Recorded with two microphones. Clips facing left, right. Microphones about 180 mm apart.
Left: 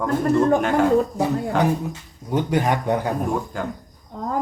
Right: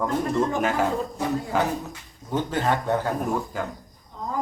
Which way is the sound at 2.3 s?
15° left (ahead or behind).